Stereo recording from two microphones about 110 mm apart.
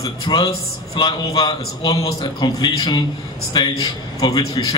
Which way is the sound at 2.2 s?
45° left (ahead or behind).